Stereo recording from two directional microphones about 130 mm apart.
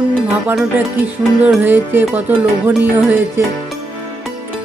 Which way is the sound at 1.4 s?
15° right (ahead or behind).